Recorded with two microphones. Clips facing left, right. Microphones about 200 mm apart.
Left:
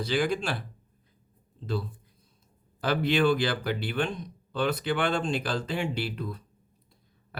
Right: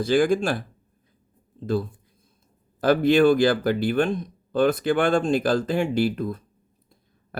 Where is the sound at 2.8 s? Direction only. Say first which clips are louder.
Right 7 dB; 50° right (ahead or behind).